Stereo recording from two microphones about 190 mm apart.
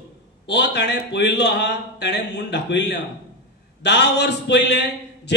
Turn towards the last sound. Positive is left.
turn(degrees=65)  # may be behind; listen again after turning